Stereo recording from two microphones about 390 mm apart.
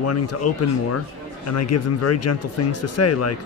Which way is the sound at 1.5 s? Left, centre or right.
Left.